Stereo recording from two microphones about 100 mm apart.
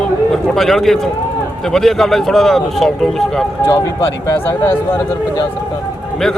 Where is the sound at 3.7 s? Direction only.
35° left (ahead or behind).